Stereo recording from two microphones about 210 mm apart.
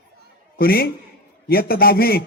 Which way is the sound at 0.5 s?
45° left (ahead or behind).